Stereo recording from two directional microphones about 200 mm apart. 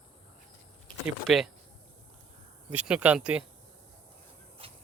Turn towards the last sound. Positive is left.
turn(degrees=-30)  # may be behind; listen again after turning